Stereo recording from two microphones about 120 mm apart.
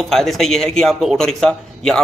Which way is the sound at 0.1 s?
Centre (ahead or behind).